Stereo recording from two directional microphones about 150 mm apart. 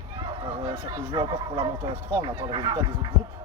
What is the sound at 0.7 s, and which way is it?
Speech, 35° right (ahead or behind).